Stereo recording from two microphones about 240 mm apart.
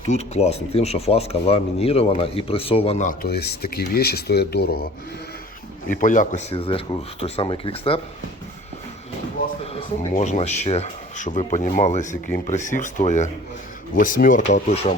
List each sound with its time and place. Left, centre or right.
0.0 s speech: left
5.9 s speech: left
10.2 s speech: left